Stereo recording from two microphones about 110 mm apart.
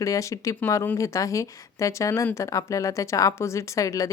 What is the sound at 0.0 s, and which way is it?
Speech, 30° left (ahead or behind).